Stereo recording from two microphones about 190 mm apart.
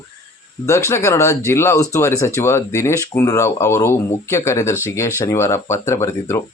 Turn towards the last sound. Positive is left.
turn(degrees=15)  # may be behind; listen again after turning